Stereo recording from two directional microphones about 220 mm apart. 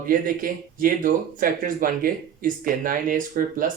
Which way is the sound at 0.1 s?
40° right (ahead or behind).